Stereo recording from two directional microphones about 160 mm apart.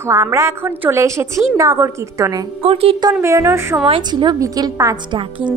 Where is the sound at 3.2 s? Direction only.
20° right (ahead or behind).